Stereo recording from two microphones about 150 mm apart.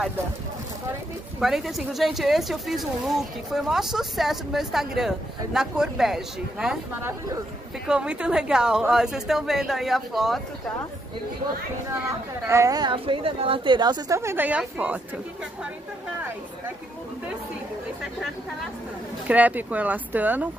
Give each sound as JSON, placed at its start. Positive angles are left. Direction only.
{"t": 1.4, "sound": "speech", "side_deg": 0}
{"t": 7.0, "sound": "speech", "side_deg": -20}
{"t": 7.8, "sound": "speech", "side_deg": -5}
{"t": 12.1, "sound": "speech", "side_deg": -20}
{"t": 19.2, "sound": "speech", "side_deg": -10}